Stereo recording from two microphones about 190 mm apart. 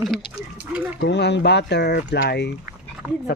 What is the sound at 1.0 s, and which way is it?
Speech, 65° left (ahead or behind).